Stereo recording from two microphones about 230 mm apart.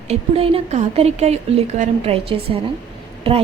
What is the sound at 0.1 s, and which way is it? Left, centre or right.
A woman's voice, right.